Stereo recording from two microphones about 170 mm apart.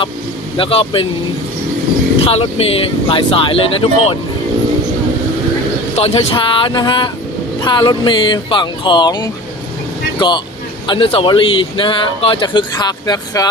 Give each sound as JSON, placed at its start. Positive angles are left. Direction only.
{"t": 0.5, "sound": "speech", "side_deg": 30}
{"t": 2.2, "sound": "speech", "side_deg": 35}
{"t": 6.0, "sound": "speech", "side_deg": 35}